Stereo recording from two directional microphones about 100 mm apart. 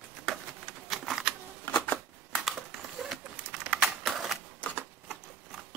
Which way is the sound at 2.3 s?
Centre (ahead or behind).